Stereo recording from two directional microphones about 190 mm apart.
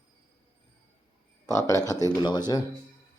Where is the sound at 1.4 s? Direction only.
20° left (ahead or behind).